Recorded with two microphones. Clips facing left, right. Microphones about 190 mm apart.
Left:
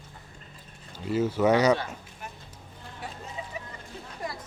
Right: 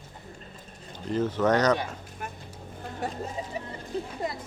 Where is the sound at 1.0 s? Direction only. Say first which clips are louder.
Left 1 dB; 10° left (ahead or behind).